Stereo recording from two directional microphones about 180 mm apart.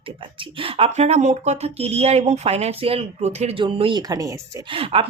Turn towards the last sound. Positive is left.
turn(degrees=-30)  # may be behind; listen again after turning